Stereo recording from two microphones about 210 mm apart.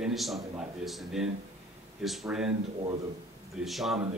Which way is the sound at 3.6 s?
Centre (ahead or behind).